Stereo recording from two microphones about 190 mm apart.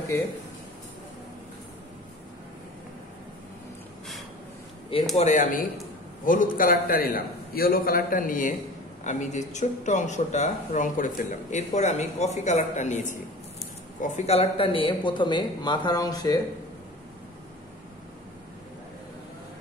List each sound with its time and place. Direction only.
5.1 s a man's voice: 40° left (ahead or behind); by 16.3 s 20° left (ahead or behind)